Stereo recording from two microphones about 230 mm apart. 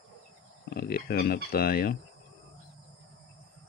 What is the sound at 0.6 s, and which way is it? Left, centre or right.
Speech, left.